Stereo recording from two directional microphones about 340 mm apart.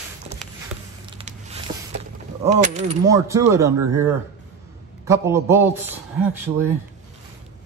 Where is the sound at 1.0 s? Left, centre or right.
Centre.